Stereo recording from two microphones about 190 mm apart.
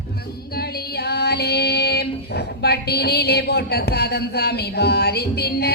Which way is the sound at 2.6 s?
60° left (ahead or behind).